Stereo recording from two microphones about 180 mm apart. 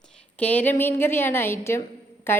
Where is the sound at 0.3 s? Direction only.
10° left (ahead or behind).